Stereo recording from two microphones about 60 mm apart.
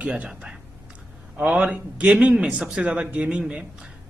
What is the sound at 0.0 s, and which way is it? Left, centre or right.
A man's voice, centre.